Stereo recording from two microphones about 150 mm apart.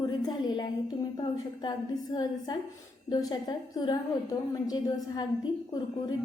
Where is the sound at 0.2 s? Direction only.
25° left (ahead or behind).